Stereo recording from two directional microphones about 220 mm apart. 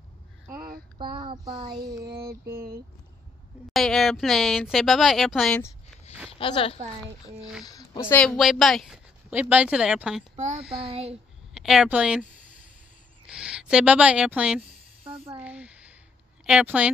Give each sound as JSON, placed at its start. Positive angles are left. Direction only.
{"t": 0.5, "sound": "child singing", "side_deg": -20}
{"t": 1.4, "sound": "a sound", "side_deg": -20}
{"t": 3.7, "sound": "speech", "side_deg": 0}
{"t": 6.3, "sound": "speech", "side_deg": 25}
{"t": 10.8, "sound": "a sound", "side_deg": -25}
{"t": 11.5, "sound": "speech", "side_deg": 0}
{"t": 13.3, "sound": "speech", "side_deg": -5}
{"t": 15.0, "sound": "speech", "side_deg": -25}
{"t": 15.4, "sound": "speech", "side_deg": -5}